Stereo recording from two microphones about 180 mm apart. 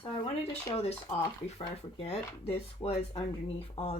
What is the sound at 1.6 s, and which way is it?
Speech, 30° left (ahead or behind).